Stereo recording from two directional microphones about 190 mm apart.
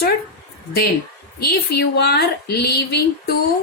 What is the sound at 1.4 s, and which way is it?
A woman's voice, 55° left (ahead or behind).